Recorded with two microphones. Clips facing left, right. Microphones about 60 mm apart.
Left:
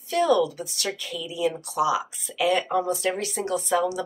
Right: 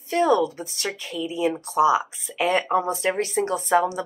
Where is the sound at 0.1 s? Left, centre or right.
Right.